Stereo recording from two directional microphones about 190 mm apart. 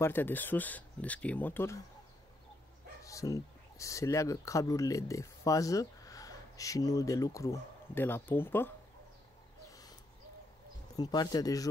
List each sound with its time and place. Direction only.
0.0 s speech: 10° left (ahead or behind)
3.0 s speech: 15° left (ahead or behind)
9.7 s a sound: 20° left (ahead or behind)
11.0 s speech: 20° left (ahead or behind)